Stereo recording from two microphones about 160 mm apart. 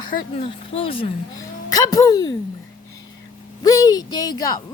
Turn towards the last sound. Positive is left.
turn(degrees=25)  # may be behind; listen again after turning